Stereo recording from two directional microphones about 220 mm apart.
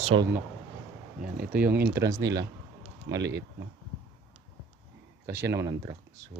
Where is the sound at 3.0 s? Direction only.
55° right (ahead or behind).